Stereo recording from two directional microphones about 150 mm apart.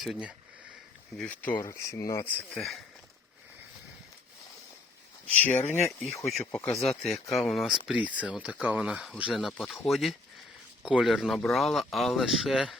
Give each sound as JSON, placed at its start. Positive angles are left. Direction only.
{"t": 0.0, "sound": "speech", "side_deg": -5}
{"t": 1.1, "sound": "speech", "side_deg": 5}
{"t": 2.6, "sound": "speech", "side_deg": 0}
{"t": 5.4, "sound": "speech", "side_deg": 10}
{"t": 5.6, "sound": "speech", "side_deg": 50}
{"t": 6.2, "sound": "speech", "side_deg": 0}